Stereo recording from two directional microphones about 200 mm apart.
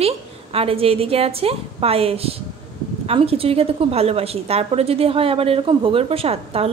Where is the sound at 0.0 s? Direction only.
30° right (ahead or behind).